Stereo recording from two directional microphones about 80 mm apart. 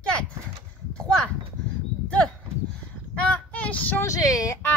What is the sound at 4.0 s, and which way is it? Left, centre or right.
Speech, left.